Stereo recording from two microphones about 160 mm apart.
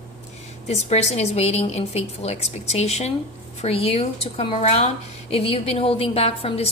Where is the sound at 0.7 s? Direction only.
40° left (ahead or behind).